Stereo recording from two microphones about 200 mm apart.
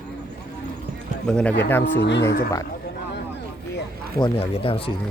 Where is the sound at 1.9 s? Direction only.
60° left (ahead or behind).